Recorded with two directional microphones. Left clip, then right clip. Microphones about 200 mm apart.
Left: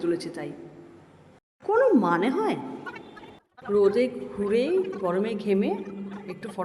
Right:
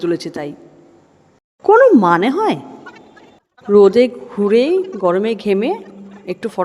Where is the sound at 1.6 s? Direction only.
35° right (ahead or behind).